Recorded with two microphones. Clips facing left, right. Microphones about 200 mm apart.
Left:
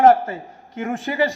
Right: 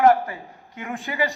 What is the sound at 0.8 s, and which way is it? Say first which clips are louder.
Speech: left 6 dB; 45° left (ahead or behind).